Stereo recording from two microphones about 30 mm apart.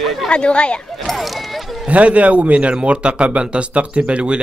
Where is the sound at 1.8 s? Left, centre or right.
Right.